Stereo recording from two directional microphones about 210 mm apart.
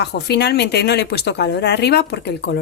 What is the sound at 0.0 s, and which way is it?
Speech, 50° left (ahead or behind).